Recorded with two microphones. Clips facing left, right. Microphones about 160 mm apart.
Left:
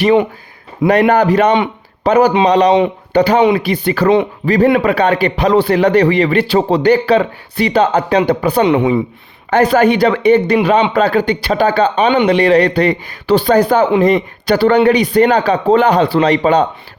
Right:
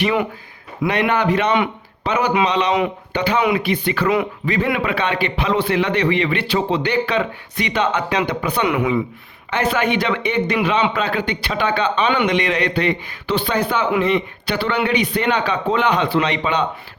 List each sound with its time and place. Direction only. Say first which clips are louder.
0.0 s a woman's voice: left 8 dB; 30° left (ahead or behind)
9.5 s speech: left 9 dB; 40° left (ahead or behind)